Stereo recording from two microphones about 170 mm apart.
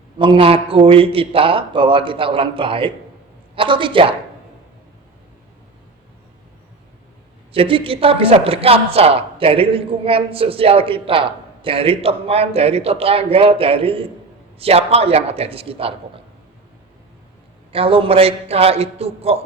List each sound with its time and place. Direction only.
0.2 s a woman's voice: 30° right (ahead or behind)
7.5 s a woman's voice: 35° right (ahead or behind)
17.7 s a woman's voice: 35° right (ahead or behind)